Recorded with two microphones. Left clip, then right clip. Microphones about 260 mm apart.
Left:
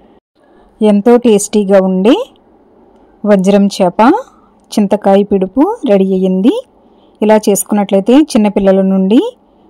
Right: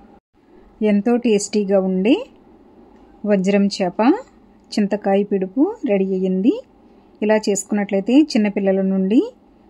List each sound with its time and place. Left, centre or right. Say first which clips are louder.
0.7 s speech: left 10 dB; left